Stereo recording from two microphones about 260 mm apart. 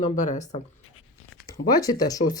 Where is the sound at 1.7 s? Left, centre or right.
Centre.